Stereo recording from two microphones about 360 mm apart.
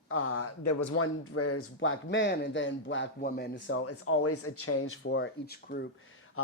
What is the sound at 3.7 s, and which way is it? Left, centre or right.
Speech, left.